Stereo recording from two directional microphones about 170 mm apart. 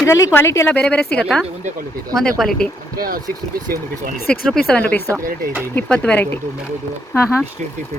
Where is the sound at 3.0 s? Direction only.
60° right (ahead or behind).